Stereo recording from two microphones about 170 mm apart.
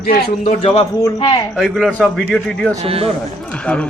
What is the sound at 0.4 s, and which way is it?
Speech, 35° left (ahead or behind).